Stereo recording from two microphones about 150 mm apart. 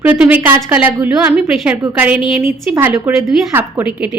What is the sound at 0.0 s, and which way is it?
A woman's voice, 10° right (ahead or behind).